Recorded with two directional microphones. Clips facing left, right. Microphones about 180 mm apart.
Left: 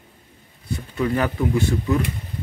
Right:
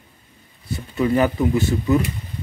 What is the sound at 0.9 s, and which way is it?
Speech, 5° right (ahead or behind).